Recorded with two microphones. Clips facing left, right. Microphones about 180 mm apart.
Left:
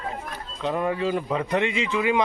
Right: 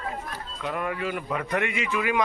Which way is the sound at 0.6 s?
25° left (ahead or behind).